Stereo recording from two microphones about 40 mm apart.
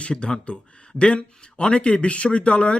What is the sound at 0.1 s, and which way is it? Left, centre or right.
Speech, left.